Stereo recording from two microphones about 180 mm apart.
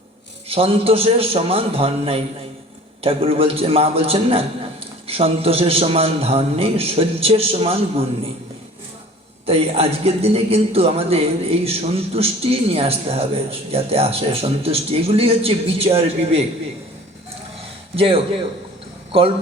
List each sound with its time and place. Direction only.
0.4 s a man's voice: 30° right (ahead or behind)
9.5 s a man's voice: 35° right (ahead or behind)
17.9 s a man's voice: 30° right (ahead or behind)